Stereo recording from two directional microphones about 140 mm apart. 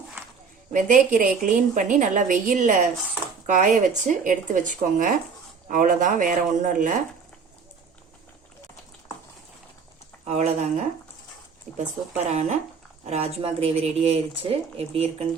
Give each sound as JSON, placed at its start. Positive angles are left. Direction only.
{"t": 0.7, "sound": "a woman's voice", "side_deg": -70}
{"t": 10.2, "sound": "a woman's voice", "side_deg": -50}
{"t": 12.1, "sound": "a woman's voice", "side_deg": -55}